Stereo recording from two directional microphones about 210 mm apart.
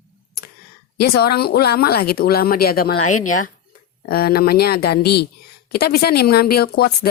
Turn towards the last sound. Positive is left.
turn(degrees=50)  # may be behind; listen again after turning